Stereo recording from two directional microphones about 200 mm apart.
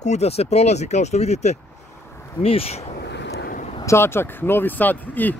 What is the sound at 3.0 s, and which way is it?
Vehicle, 60° left (ahead or behind).